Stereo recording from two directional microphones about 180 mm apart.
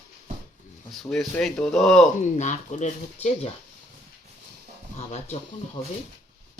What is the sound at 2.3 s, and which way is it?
Speech, 40° left (ahead or behind).